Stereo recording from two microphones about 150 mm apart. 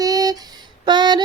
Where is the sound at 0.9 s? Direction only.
30° right (ahead or behind).